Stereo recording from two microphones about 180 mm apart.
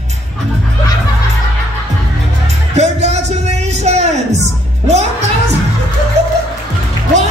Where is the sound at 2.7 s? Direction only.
40° right (ahead or behind).